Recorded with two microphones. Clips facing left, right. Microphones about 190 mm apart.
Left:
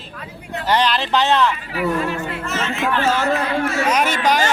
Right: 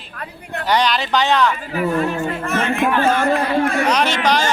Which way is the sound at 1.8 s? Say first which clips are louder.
Right 2 dB; 45° right (ahead or behind).